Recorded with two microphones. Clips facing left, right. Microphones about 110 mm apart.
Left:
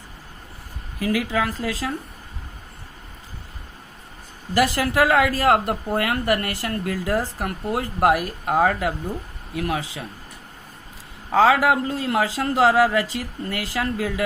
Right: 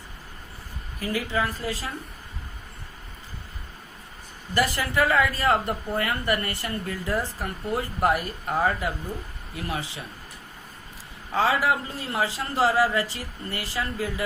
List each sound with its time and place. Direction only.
0.9 s speech: 90° left
4.5 s speech: 90° left
9.6 s speech: 90° left
11.3 s speech: 90° left